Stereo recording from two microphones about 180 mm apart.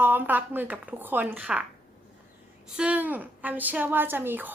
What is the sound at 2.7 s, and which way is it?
A woman's voice, 5° right (ahead or behind).